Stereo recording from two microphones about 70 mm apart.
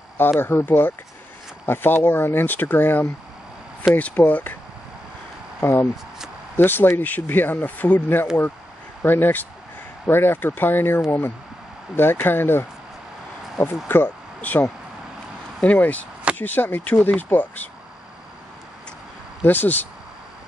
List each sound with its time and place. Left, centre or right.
0.4 s speech: left
5.6 s speech: left
13.8 s speech: left
15.6 s speech: left
19.4 s speech: left